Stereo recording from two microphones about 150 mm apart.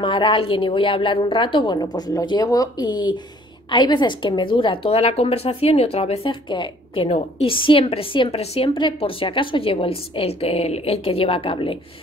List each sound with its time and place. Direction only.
0.0 s a woman's voice: 35° left (ahead or behind)